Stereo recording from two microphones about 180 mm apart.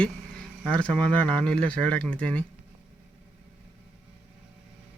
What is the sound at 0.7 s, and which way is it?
Speech, 5° left (ahead or behind).